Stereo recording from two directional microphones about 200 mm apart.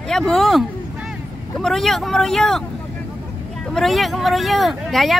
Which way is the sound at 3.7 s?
Centre (ahead or behind).